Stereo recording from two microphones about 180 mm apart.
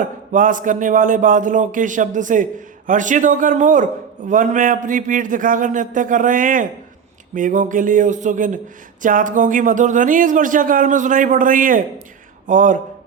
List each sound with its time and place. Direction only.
0.0 s a man's voice: 45° right (ahead or behind)